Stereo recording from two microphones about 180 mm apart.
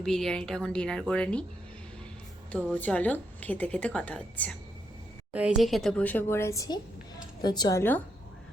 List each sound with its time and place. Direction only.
0.0 s a woman's voice: centre (ahead or behind)
2.5 s a woman's voice: 5° left (ahead or behind)
5.3 s a woman's voice: 5° right (ahead or behind); by 8.0 s 10° left (ahead or behind)